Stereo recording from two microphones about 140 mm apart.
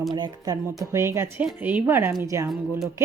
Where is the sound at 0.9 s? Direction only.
20° right (ahead or behind).